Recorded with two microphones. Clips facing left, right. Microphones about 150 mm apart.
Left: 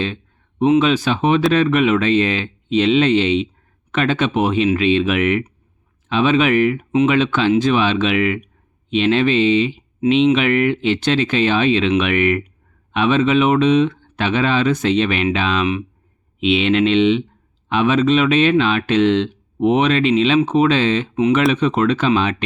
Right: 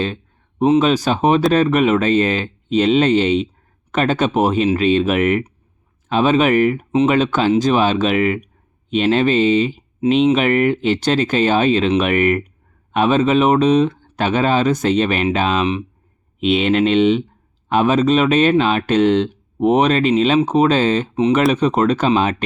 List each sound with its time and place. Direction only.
0.6 s speech: 40° right (ahead or behind)